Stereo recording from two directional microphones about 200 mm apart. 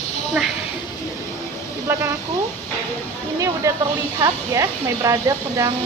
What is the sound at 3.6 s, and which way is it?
Speech, 15° right (ahead or behind).